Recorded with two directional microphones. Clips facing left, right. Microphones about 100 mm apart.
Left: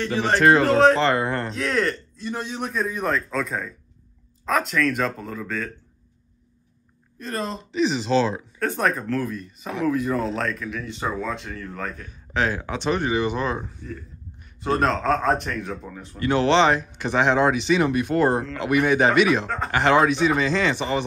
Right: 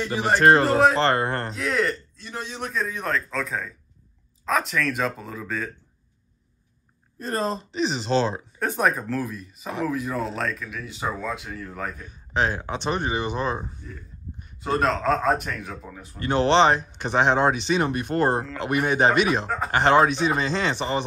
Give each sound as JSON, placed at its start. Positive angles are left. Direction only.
{"t": 0.0, "sound": "speech", "side_deg": -10}
{"t": 0.4, "sound": "speech", "side_deg": -40}
{"t": 0.7, "sound": "a man's voice", "side_deg": -5}
{"t": 7.2, "sound": "speech", "side_deg": -35}
{"t": 8.5, "sound": "a man's voice", "side_deg": -15}
{"t": 12.4, "sound": "speech", "side_deg": -25}
{"t": 14.6, "sound": "a man's voice", "side_deg": 0}
{"t": 16.2, "sound": "speech", "side_deg": -30}
{"t": 19.4, "sound": "speech", "side_deg": -10}
{"t": 19.7, "sound": "speech", "side_deg": -35}